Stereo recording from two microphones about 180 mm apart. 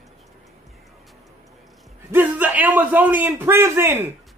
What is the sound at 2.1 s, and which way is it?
A man's voice, 10° right (ahead or behind).